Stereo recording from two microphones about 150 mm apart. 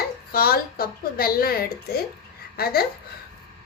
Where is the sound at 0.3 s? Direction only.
80° left.